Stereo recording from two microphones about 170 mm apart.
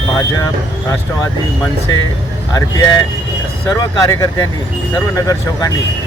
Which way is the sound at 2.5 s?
20° left (ahead or behind).